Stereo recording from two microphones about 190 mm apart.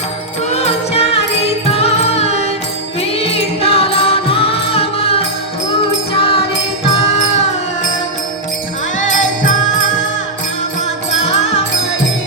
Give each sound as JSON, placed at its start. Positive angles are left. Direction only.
{"t": 0.5, "sound": "music", "side_deg": 35}